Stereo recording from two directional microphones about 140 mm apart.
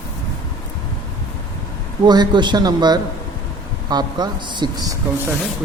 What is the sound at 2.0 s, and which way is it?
Speech, 30° right (ahead or behind).